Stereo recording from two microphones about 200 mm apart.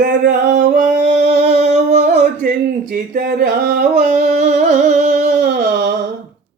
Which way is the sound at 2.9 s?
50° right (ahead or behind).